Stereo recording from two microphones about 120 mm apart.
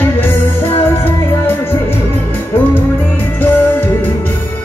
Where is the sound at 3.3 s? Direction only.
15° left (ahead or behind).